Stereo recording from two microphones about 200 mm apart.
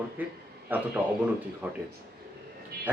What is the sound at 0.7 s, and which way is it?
Speech, 10° right (ahead or behind).